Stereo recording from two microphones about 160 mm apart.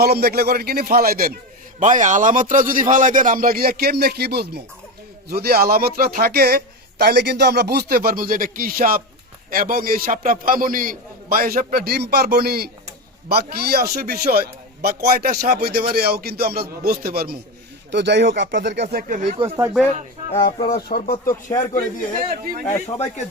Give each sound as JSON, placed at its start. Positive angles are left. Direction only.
{"t": 0.0, "sound": "a man's voice", "side_deg": -75}
{"t": 1.8, "sound": "a man's voice", "side_deg": -50}
{"t": 5.3, "sound": "a man's voice", "side_deg": -75}
{"t": 7.0, "sound": "a man's voice", "side_deg": -90}
{"t": 17.9, "sound": "speech", "side_deg": -90}
{"t": 20.3, "sound": "speech", "side_deg": 30}
{"t": 20.7, "sound": "speech", "side_deg": 70}
{"t": 22.3, "sound": "a man's voice", "side_deg": -65}